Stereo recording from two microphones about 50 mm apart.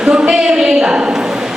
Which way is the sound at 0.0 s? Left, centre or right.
Centre.